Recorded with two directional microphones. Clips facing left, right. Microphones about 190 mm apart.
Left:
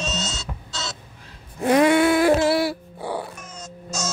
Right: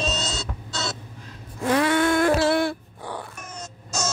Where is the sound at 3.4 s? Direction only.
60° right (ahead or behind).